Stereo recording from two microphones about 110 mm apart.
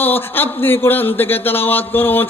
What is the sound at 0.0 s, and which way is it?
Speech, 20° left (ahead or behind).